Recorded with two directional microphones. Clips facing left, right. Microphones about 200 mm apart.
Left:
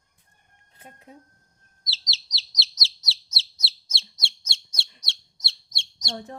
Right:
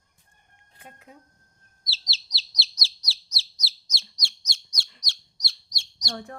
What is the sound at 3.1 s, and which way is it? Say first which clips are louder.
Bird: left 2 dB; 25° left (ahead or behind).